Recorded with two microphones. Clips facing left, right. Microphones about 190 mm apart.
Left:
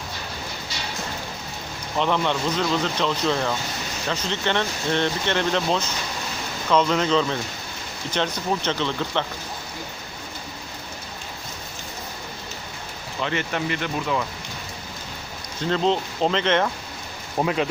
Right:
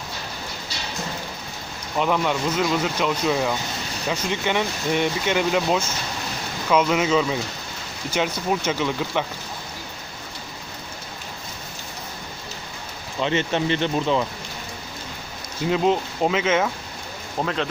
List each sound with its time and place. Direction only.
2.0 s speech: 5° right (ahead or behind)
13.2 s speech: 25° right (ahead or behind)
15.6 s speech: 10° right (ahead or behind)
17.3 s a man's voice: 10° left (ahead or behind)